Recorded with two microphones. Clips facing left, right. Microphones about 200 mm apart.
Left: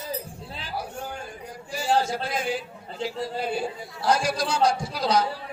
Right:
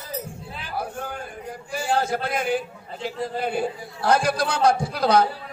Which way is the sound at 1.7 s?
55° right (ahead or behind).